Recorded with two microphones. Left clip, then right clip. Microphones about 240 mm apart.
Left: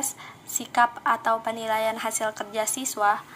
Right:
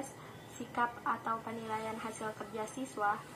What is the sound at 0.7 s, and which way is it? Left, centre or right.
A woman's voice, left.